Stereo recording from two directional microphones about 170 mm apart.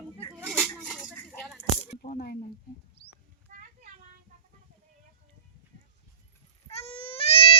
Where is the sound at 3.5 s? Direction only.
45° right (ahead or behind).